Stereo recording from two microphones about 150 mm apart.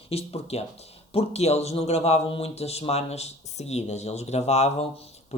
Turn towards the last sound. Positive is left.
turn(degrees=45)  # may be behind; listen again after turning